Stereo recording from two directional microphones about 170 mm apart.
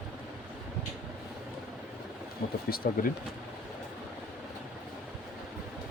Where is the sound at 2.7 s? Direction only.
65° left (ahead or behind).